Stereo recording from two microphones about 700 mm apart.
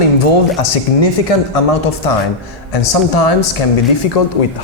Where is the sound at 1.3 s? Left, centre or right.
Left.